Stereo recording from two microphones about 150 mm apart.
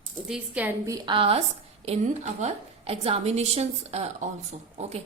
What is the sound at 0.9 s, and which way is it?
Speech, 30° right (ahead or behind).